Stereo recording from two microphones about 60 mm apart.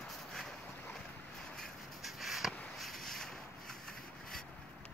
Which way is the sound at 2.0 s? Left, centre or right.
Centre.